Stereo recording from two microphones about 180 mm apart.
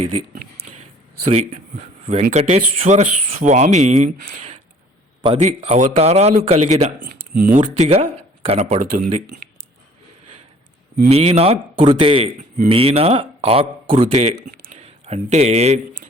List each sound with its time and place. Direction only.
1.2 s speech: 35° right (ahead or behind)
5.2 s speech: 30° right (ahead or behind)
11.1 s speech: 35° right (ahead or behind)